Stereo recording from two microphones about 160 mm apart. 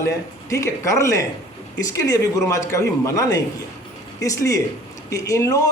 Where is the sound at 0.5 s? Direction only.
20° left (ahead or behind).